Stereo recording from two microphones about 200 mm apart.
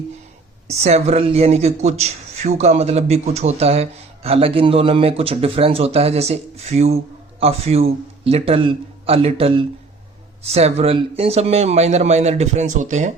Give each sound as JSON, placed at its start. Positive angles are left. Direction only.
{"t": 0.7, "sound": "speech", "side_deg": -30}